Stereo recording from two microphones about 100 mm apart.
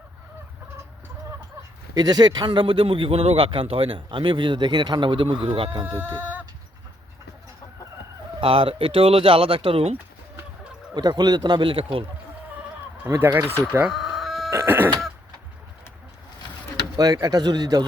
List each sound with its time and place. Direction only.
2.0 s speech: 45° right (ahead or behind); by 5.8 s 65° right (ahead or behind)
5.8 s speech: 20° right (ahead or behind)
8.4 s speech: 65° right (ahead or behind); by 10.0 s 80° right
10.9 s speech: 45° right (ahead or behind); by 12.0 s 65° right (ahead or behind)
13.1 s speech: 25° right (ahead or behind)
13.9 s chicken: centre (ahead or behind)
14.5 s speech: 25° right (ahead or behind)
17.0 s speech: 40° right (ahead or behind)